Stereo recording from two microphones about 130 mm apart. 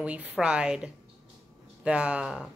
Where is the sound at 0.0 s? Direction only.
10° right (ahead or behind).